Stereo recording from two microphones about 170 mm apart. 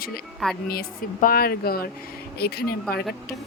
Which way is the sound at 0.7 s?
60° left (ahead or behind).